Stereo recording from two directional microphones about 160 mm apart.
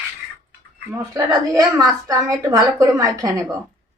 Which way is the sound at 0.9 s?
20° right (ahead or behind).